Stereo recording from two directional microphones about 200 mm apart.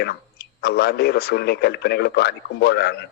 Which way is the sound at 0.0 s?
50° left (ahead or behind).